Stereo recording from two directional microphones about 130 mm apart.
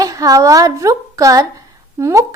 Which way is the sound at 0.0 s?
25° right (ahead or behind).